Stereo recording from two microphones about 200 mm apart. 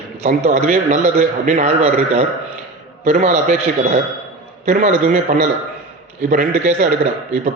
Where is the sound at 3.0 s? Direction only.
40° right (ahead or behind).